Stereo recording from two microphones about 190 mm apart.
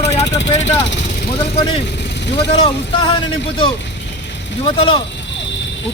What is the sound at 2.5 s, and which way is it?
Speech, 30° left (ahead or behind).